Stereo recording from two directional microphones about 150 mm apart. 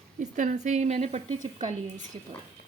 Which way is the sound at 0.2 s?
55° right (ahead or behind).